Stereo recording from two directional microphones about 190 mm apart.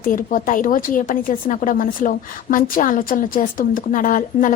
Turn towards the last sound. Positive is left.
turn(degrees=45)  # may be behind; listen again after turning